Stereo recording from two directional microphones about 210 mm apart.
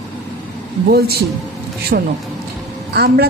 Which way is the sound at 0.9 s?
50° right (ahead or behind).